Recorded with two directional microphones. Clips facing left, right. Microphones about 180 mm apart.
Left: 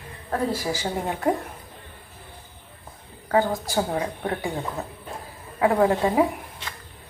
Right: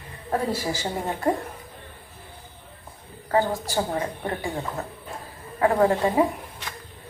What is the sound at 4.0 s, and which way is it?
Speech, centre (ahead or behind).